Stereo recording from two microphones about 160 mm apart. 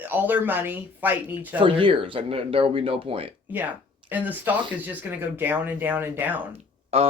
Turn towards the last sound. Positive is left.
turn(degrees=-40)  # may be behind; listen again after turning